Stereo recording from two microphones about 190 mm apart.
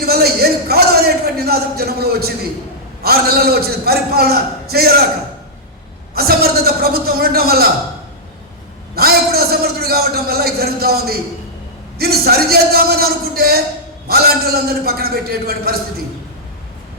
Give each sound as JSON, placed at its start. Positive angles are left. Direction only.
{"t": 0.0, "sound": "a man's voice", "side_deg": -55}
{"t": 6.1, "sound": "a man's voice", "side_deg": -55}
{"t": 9.0, "sound": "a man's voice", "side_deg": -55}